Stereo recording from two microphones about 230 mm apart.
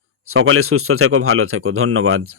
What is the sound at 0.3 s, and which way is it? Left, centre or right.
Speech, right.